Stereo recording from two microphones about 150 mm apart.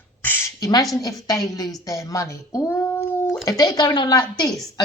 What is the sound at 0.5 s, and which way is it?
A woman's voice, 25° left (ahead or behind).